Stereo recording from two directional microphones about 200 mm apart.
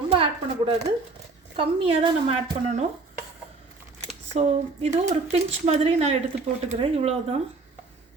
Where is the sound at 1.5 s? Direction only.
25° right (ahead or behind).